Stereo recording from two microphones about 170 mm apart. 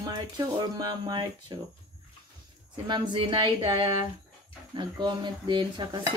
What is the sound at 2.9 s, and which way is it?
Speech, 25° right (ahead or behind).